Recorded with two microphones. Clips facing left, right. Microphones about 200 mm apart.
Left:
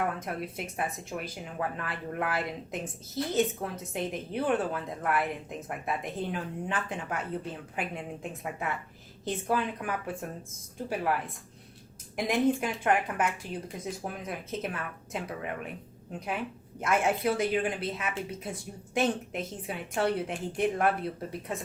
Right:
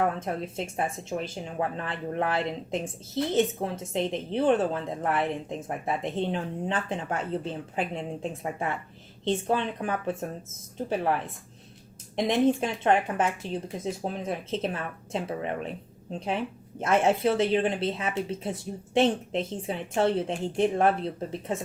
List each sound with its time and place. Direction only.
0.0 s speech: 25° right (ahead or behind)
12.1 s speech: 25° right (ahead or behind)